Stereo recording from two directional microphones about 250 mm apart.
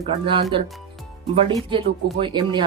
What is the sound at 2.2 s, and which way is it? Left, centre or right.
Speech, centre.